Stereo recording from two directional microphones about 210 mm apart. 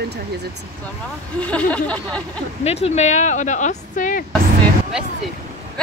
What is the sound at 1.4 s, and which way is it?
Speech, 5° left (ahead or behind).